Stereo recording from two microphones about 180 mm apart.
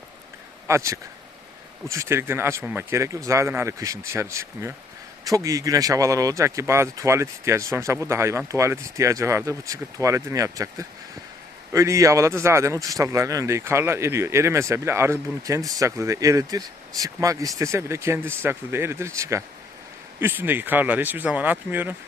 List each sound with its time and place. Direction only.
0.7 s a man's voice: 15° right (ahead or behind)